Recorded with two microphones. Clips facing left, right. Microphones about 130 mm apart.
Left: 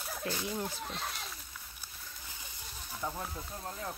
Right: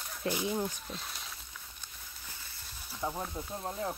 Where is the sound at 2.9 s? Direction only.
15° right (ahead or behind).